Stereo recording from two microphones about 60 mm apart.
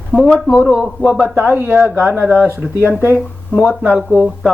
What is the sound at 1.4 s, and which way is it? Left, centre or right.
Speech, right.